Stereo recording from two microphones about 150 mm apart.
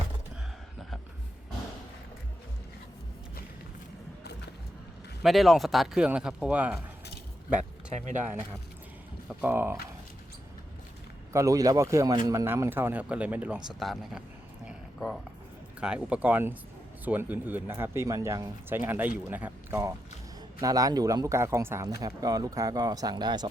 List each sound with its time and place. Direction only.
5.2 s speech: centre (ahead or behind)
9.4 s speech: 15° right (ahead or behind)
11.3 s speech: 20° right (ahead or behind)
13.7 s speech: centre (ahead or behind)
14.7 s a sound: centre (ahead or behind)
15.8 s speech: 5° right (ahead or behind)
20.6 s speech: 25° right (ahead or behind)